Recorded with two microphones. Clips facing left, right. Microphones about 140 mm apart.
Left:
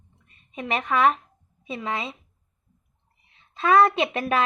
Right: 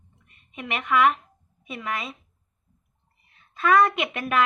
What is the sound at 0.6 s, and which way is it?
A woman's voice, 35° left (ahead or behind).